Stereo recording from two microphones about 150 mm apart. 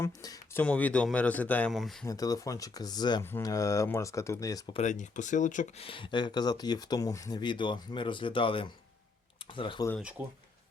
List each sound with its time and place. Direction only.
0.0 s speech: 25° left (ahead or behind)
0.6 s speech: 10° left (ahead or behind)
2.0 s speech: 25° left (ahead or behind)
4.7 s speech: 50° left (ahead or behind); by 9.8 s 35° left (ahead or behind)
10.2 s speech: 10° right (ahead or behind)